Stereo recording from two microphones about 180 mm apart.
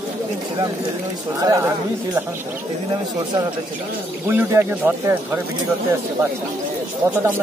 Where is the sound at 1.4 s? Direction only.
15° right (ahead or behind).